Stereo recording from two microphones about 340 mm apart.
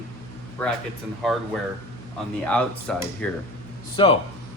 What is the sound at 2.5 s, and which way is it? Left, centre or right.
Speech, centre.